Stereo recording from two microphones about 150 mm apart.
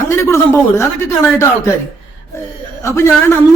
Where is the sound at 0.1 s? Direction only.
20° left (ahead or behind).